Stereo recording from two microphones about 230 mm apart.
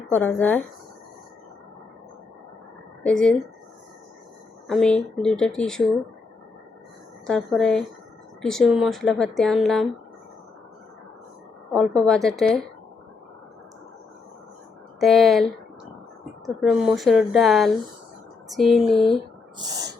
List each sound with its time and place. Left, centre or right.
0.1 s speech: centre
3.0 s a woman's voice: centre
4.7 s a woman's voice: centre
7.3 s a woman's voice: centre
11.7 s a woman's voice: centre
15.0 s a woman's voice: centre
16.6 s a woman's voice: centre
19.5 s gasp: centre